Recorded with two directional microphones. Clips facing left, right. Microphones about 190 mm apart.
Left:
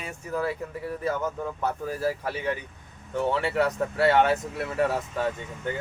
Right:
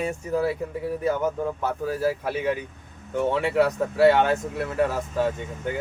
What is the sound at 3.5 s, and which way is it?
Speech, centre (ahead or behind).